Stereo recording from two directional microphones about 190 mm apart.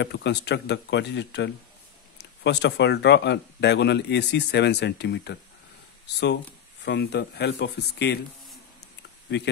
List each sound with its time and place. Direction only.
0.0 s speech: 65° left (ahead or behind)
6.8 s speech: 65° left (ahead or behind)